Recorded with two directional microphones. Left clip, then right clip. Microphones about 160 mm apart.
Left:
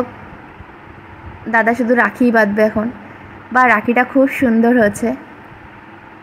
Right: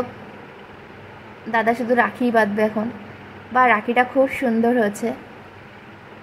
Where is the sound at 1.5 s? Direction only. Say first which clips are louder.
Left 5 dB; 15° left (ahead or behind).